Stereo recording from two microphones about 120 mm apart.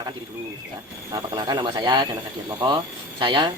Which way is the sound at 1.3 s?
35° right (ahead or behind).